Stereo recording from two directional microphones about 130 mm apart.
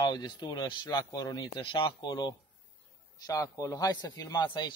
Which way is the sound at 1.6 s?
40° left (ahead or behind).